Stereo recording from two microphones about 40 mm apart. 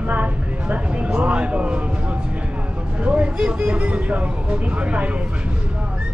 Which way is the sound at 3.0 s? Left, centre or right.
Right.